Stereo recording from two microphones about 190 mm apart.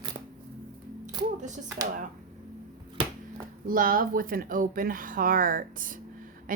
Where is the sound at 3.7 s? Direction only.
50° right (ahead or behind).